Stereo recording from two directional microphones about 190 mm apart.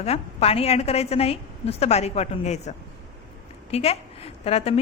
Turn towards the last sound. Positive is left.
turn(degrees=30)  # may be behind; listen again after turning